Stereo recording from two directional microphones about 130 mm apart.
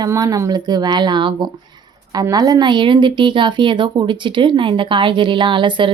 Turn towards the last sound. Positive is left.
turn(degrees=-40)  # may be behind; listen again after turning